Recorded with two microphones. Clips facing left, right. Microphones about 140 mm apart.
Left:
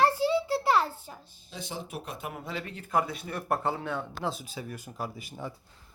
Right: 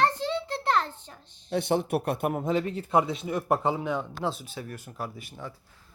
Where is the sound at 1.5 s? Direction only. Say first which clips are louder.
Right 13 dB; 65° right (ahead or behind); by 4.0 s 15° right (ahead or behind).